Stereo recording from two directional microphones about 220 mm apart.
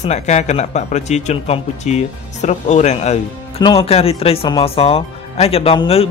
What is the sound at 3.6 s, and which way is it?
Speech, 20° left (ahead or behind).